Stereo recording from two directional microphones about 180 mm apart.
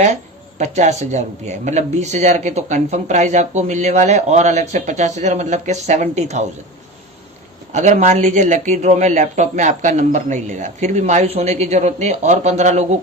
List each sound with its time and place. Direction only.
0.6 s speech: 40° right (ahead or behind)
7.7 s speech: 40° right (ahead or behind)